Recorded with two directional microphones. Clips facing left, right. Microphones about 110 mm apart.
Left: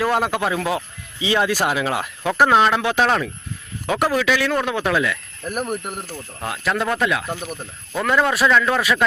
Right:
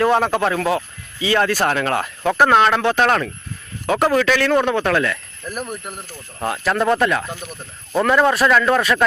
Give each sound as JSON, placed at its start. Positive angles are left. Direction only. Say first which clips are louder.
{"t": 0.0, "sound": "a man's voice", "louder": "right 3 dB", "side_deg": 5}
{"t": 6.4, "sound": "a man's voice", "louder": "right 4 dB", "side_deg": 0}
{"t": 7.3, "sound": "speech", "louder": "left 3 dB", "side_deg": 15}
{"t": 8.0, "sound": "a man's voice", "louder": "right 2 dB", "side_deg": 0}